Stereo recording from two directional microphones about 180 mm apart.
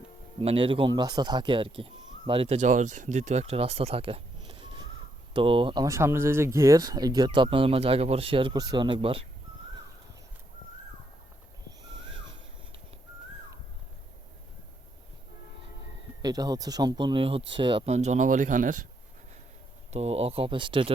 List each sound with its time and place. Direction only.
0.4 s speech: 30° right (ahead or behind)
16.2 s speech: 20° right (ahead or behind); by 18.8 s 45° right (ahead or behind)
19.9 s speech: 35° right (ahead or behind)